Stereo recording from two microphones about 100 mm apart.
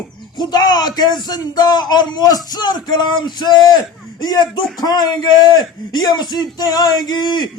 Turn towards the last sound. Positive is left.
turn(degrees=50)  # may be behind; listen again after turning